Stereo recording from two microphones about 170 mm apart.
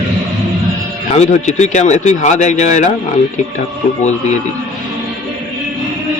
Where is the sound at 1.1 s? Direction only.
40° left (ahead or behind).